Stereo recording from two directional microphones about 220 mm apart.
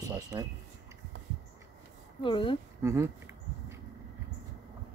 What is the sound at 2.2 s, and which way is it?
Speech, 20° left (ahead or behind).